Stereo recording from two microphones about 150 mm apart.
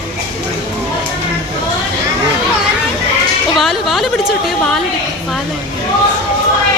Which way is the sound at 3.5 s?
Centre (ahead or behind).